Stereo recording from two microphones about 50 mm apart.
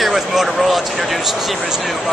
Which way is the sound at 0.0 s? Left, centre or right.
Centre.